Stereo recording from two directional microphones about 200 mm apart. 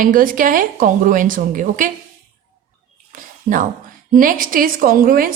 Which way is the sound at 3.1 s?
40° right (ahead or behind).